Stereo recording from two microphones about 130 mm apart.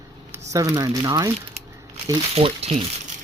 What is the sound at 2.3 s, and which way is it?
Speech, 50° right (ahead or behind).